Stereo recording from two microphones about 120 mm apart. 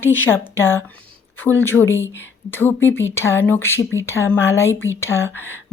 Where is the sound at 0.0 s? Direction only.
20° left (ahead or behind).